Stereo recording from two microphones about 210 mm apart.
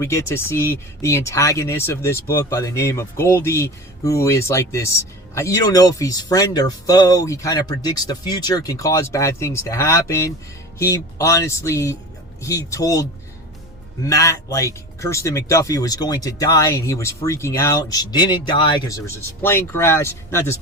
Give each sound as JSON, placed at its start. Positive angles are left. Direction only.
{"t": 0.0, "sound": "speech", "side_deg": 15}